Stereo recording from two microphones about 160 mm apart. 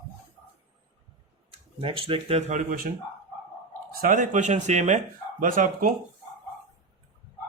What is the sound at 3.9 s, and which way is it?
Speech, 60° right (ahead or behind).